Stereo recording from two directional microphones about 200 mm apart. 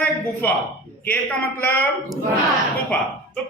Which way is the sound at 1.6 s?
10° left (ahead or behind).